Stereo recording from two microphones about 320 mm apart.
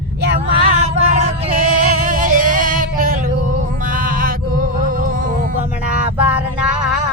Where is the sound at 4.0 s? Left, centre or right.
Right.